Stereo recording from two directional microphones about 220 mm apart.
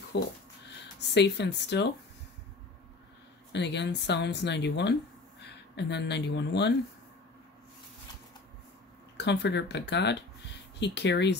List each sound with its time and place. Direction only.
0.1 s speech: 55° left (ahead or behind)
3.5 s speech: 50° left (ahead or behind)
9.1 s speech: 50° left (ahead or behind)